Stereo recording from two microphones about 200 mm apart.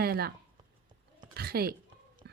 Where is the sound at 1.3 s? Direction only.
50° right (ahead or behind).